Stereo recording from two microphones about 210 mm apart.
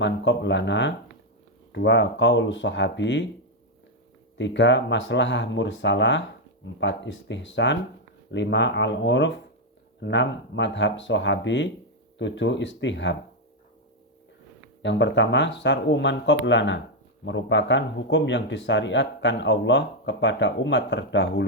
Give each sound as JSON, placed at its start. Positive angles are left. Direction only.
{"t": 0.0, "sound": "speech", "side_deg": 60}
{"t": 4.4, "sound": "speech", "side_deg": 60}
{"t": 14.8, "sound": "speech", "side_deg": 60}